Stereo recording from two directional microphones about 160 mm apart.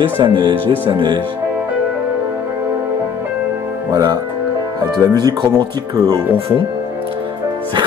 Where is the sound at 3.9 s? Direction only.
25° right (ahead or behind).